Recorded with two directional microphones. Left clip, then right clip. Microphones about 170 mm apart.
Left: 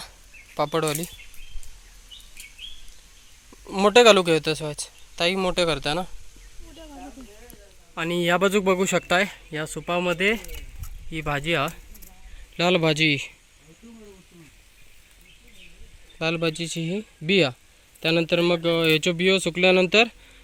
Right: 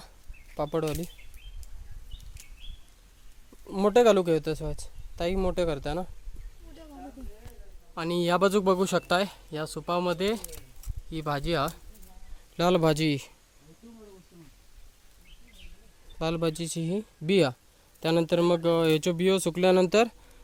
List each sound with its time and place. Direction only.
0.5 s speech: 5° right (ahead or behind)
3.7 s speech: 5° right (ahead or behind)
7.9 s speech: 5° right (ahead or behind)
9.6 s speech: 30° left (ahead or behind)
9.9 s speech: centre (ahead or behind)
12.5 s speech: 15° right (ahead or behind)
16.3 s speech: 15° right (ahead or behind)